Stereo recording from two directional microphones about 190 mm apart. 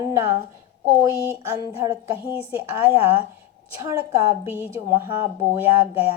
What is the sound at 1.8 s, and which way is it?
A woman's voice, 15° right (ahead or behind).